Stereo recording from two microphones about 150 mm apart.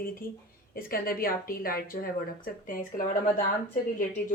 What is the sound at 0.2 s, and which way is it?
A woman's voice, 70° left (ahead or behind).